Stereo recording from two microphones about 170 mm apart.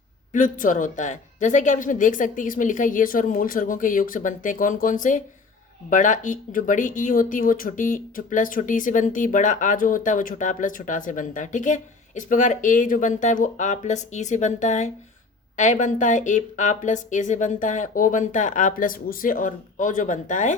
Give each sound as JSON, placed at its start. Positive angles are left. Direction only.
{"t": 0.3, "sound": "speech", "side_deg": 50}